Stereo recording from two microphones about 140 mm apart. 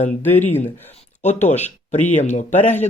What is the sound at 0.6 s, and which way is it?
Speech, 55° left (ahead or behind).